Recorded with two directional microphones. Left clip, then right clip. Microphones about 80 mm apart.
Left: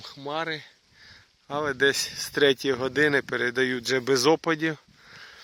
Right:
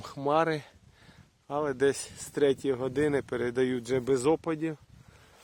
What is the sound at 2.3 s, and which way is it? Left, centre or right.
Speech, centre.